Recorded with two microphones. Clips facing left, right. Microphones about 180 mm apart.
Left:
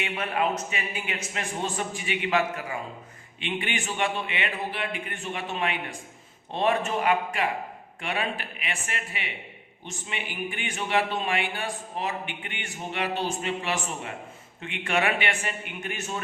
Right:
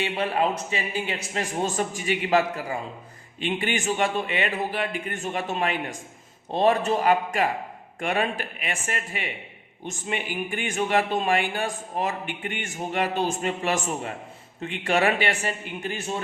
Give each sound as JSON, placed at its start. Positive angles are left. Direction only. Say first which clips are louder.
{"t": 0.0, "sound": "a man's voice", "louder": "right 3 dB", "side_deg": -30}